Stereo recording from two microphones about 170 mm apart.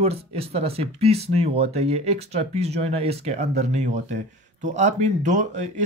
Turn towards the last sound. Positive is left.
turn(degrees=-45)  # may be behind; listen again after turning